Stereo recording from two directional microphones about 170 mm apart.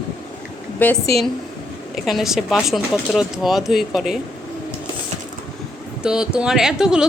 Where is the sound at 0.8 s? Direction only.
10° left (ahead or behind).